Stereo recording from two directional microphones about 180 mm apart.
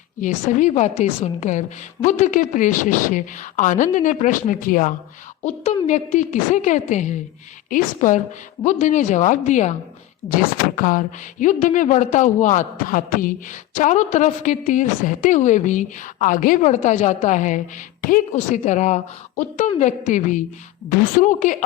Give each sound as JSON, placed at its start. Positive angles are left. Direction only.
{"t": 0.2, "sound": "a woman's voice", "side_deg": 45}